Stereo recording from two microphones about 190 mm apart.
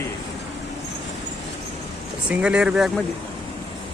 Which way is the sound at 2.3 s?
5° right (ahead or behind).